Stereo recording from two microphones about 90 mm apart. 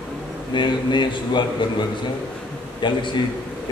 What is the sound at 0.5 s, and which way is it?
A man's voice, 60° left (ahead or behind).